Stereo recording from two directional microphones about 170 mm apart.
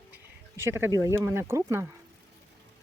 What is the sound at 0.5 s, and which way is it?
Speech, 15° right (ahead or behind).